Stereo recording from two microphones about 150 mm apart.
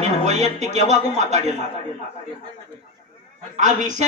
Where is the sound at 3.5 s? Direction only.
55° right (ahead or behind).